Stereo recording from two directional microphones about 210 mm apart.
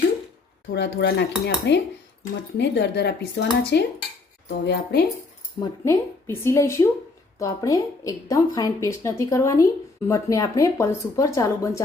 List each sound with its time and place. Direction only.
0.7 s speech: 55° left (ahead or behind)
5.5 s a woman's voice: 15° left (ahead or behind)